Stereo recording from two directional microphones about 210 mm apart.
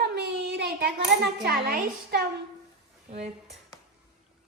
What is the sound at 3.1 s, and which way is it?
Speech, 30° right (ahead or behind).